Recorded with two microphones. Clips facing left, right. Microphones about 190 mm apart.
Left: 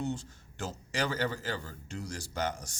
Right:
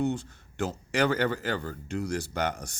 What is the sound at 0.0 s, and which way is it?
A man's voice, 60° right (ahead or behind).